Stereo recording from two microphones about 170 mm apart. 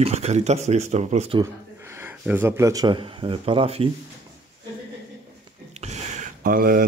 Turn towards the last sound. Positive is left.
turn(degrees=-55)  # may be behind; listen again after turning